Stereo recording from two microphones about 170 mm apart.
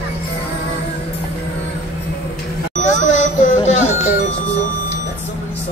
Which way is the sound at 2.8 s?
45° left (ahead or behind).